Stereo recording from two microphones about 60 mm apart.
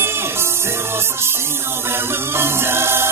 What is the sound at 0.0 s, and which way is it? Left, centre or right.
Music, right.